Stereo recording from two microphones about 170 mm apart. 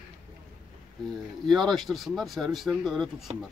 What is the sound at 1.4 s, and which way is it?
Speech, centre (ahead or behind).